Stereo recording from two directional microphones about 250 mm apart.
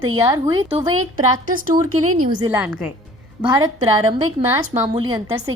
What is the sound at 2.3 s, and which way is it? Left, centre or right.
Speech, centre.